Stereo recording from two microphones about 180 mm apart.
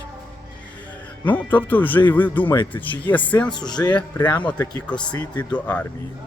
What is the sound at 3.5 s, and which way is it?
Speech, 25° left (ahead or behind).